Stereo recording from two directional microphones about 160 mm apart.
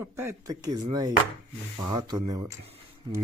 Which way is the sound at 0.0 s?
15° right (ahead or behind).